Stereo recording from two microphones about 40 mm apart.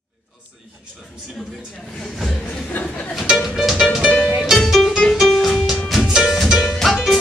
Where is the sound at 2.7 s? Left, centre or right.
Left.